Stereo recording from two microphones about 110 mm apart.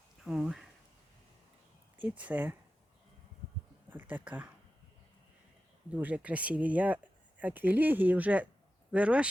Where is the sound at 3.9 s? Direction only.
15° right (ahead or behind).